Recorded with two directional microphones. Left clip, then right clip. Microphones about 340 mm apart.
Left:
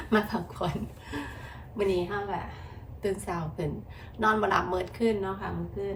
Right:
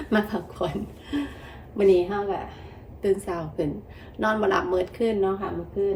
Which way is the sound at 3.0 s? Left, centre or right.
Centre.